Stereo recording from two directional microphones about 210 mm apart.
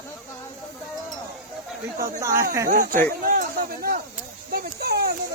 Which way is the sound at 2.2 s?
15° right (ahead or behind).